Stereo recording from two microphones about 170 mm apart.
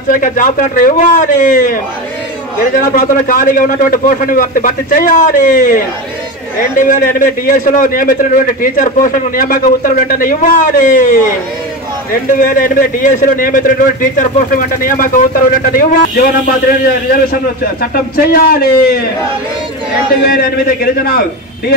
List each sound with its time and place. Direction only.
0.1 s a man's voice: 50° left (ahead or behind)
2.9 s a man's voice: 55° left (ahead or behind)
20.2 s a man's voice: 65° left (ahead or behind)